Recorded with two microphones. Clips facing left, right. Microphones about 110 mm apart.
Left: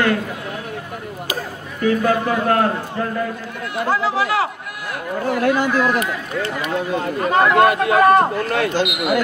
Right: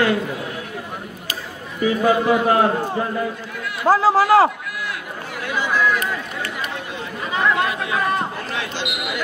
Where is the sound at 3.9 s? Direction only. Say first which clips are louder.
Right 6 dB; 40° right (ahead or behind).